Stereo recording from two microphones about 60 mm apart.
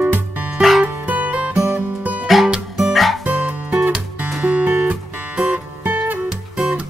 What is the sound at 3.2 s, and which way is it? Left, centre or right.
Music, right.